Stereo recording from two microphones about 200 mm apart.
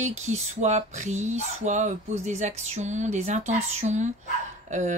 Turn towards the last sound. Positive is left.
turn(degrees=-35)  # may be behind; listen again after turning